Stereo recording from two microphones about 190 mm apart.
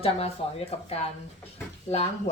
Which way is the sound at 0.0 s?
30° left (ahead or behind).